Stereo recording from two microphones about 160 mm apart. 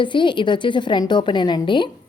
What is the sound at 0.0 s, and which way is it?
A woman's voice, 30° left (ahead or behind).